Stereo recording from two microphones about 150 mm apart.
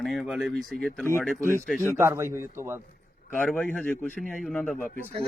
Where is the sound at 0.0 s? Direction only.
Centre (ahead or behind).